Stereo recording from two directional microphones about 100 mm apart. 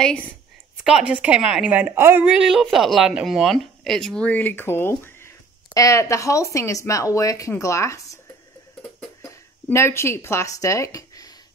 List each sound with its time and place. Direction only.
0.8 s a woman's voice: 10° right (ahead or behind)
2.2 s speech: 5° right (ahead or behind); by 8.2 s 30° left (ahead or behind)
9.2 s speech: 25° left (ahead or behind)